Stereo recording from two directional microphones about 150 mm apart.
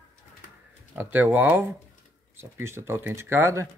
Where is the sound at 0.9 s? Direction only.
15° right (ahead or behind).